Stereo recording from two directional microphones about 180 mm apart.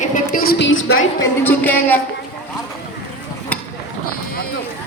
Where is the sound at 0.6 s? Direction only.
80° left.